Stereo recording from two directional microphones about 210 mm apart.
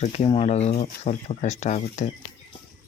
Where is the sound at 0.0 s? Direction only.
30° left (ahead or behind).